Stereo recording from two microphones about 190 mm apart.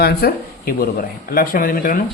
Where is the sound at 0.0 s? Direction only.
55° left (ahead or behind).